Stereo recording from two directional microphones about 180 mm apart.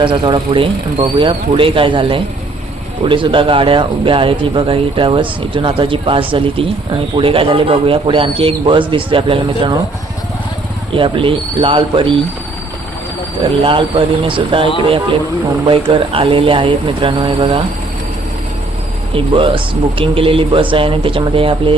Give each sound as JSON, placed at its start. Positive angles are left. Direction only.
{"t": 0.0, "sound": "a man's voice", "side_deg": -25}
{"t": 10.9, "sound": "a man's voice", "side_deg": -30}
{"t": 13.7, "sound": "a man's voice", "side_deg": -30}
{"t": 19.1, "sound": "a man's voice", "side_deg": -30}